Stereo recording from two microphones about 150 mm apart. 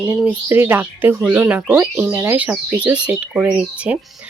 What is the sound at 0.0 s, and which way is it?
Speech, 10° right (ahead or behind).